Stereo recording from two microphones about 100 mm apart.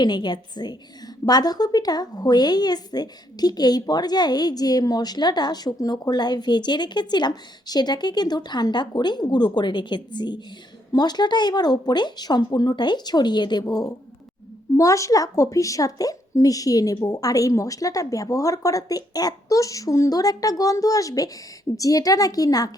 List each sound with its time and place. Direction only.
0.0 s a woman's voice: 50° left (ahead or behind)
14.8 s speech: 35° left (ahead or behind)